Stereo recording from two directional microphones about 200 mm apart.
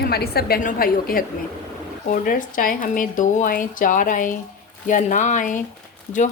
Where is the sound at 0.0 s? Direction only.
50° left (ahead or behind).